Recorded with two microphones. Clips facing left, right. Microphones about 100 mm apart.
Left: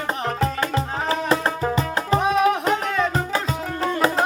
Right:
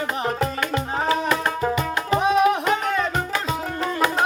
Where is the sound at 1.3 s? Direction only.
30° left (ahead or behind).